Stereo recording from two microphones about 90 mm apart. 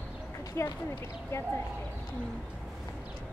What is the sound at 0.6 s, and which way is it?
Speech, 35° left (ahead or behind).